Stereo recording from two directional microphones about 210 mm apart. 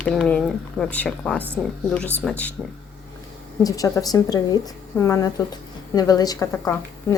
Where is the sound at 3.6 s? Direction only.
15° left (ahead or behind).